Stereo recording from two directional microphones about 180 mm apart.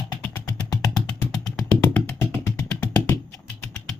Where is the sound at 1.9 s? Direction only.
10° left (ahead or behind).